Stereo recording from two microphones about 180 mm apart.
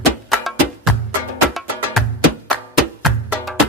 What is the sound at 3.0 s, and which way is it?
Music, centre (ahead or behind).